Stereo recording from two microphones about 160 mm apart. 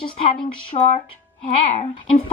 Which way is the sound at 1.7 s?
50° left (ahead or behind).